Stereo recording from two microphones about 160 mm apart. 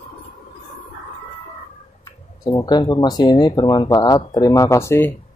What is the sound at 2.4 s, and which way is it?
Speech, 25° left (ahead or behind).